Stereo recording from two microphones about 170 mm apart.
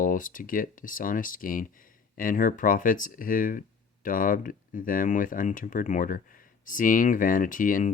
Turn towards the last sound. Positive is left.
turn(degrees=50)  # may be behind; listen again after turning